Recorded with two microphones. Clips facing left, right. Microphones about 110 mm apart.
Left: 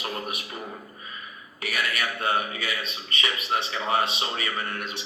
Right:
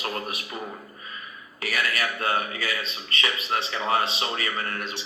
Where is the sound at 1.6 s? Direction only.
35° right (ahead or behind).